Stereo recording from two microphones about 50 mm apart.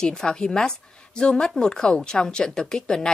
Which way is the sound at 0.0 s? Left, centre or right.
Centre.